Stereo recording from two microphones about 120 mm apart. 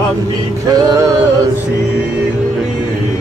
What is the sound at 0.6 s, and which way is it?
Male singing, 35° right (ahead or behind).